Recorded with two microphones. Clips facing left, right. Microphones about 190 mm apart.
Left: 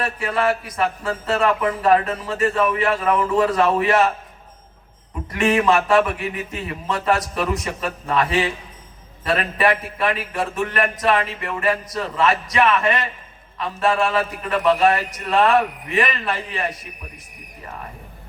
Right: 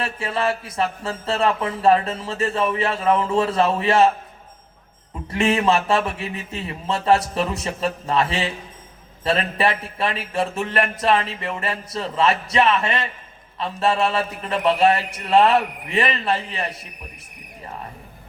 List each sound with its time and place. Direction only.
0.0 s a man's voice: 25° right (ahead or behind)
5.3 s a man's voice: 25° right (ahead or behind)